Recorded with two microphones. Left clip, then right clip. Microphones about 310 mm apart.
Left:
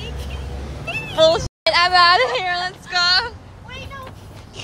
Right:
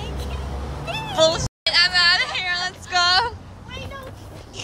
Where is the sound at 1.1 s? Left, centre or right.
Centre.